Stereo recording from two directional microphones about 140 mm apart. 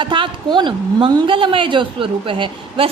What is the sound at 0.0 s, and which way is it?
A woman's voice, 35° right (ahead or behind).